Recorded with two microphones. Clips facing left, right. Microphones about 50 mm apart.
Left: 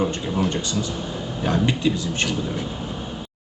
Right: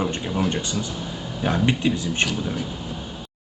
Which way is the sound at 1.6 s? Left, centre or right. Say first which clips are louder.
Even; right.